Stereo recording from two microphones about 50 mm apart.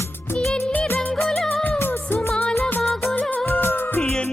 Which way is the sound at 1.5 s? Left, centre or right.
Left.